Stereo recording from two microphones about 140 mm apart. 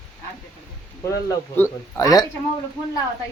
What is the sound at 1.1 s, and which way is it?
Speech, 20° left (ahead or behind).